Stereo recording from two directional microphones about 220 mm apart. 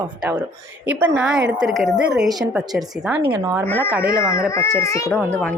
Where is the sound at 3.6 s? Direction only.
10° left (ahead or behind).